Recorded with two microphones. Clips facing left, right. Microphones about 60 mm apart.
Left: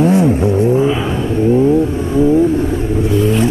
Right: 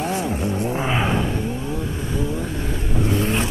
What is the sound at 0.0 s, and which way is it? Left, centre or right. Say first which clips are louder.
Vehicle: left 12 dB; left.